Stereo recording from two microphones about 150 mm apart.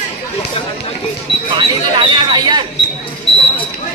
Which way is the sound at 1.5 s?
30° right (ahead or behind).